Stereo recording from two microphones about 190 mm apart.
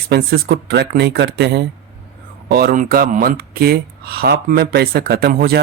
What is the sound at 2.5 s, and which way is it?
Speech, 50° right (ahead or behind).